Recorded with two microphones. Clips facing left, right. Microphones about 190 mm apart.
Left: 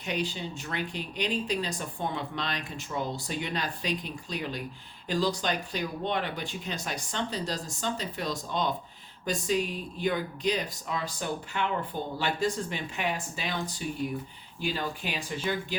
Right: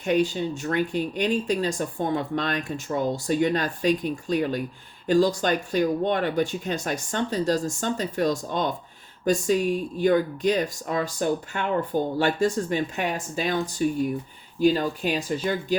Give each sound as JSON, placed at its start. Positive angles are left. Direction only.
{"t": 0.0, "sound": "speech", "side_deg": -45}